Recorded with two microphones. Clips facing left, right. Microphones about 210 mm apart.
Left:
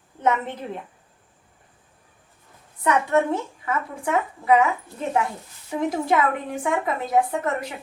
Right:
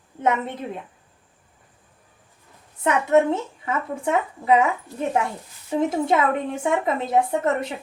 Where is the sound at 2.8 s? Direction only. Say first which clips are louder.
Right 2 dB; 25° right (ahead or behind).